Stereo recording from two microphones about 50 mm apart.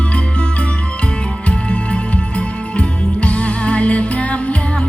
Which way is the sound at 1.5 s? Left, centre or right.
Left.